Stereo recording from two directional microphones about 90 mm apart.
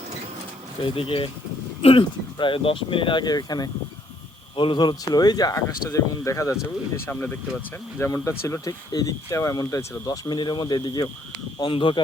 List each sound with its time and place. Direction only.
0.9 s speech: 80° left; by 3.7 s 45° left (ahead or behind)
4.5 s speech: 60° left (ahead or behind); by 6.6 s 35° left (ahead or behind)
7.0 s speech: 20° left (ahead or behind)
7.9 s speech: 30° left (ahead or behind)
10.1 s speech: 55° left (ahead or behind)
11.6 s speech: 65° left (ahead or behind)